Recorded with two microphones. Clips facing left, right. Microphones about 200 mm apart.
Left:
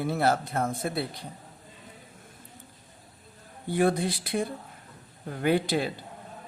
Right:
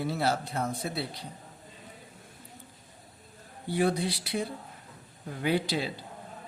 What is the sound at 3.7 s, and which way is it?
Speech, 50° left (ahead or behind).